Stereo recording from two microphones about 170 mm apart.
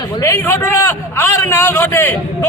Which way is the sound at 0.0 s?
15° left (ahead or behind).